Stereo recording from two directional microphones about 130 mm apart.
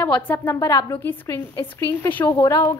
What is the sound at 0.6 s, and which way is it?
Speech, 30° left (ahead or behind).